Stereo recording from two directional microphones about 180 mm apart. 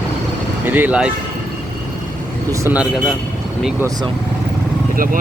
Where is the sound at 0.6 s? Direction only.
10° right (ahead or behind).